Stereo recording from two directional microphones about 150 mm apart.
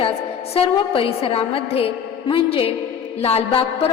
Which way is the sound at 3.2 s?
45° left (ahead or behind).